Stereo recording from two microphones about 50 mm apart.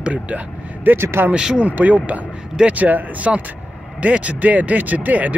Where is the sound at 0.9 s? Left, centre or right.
Right.